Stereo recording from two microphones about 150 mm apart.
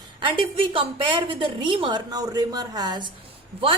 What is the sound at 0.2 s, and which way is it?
A woman's voice, 35° right (ahead or behind).